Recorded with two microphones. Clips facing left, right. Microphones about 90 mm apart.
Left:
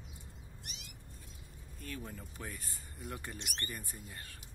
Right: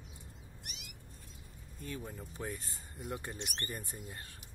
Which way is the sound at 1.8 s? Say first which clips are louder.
Right 2 dB; 20° right (ahead or behind).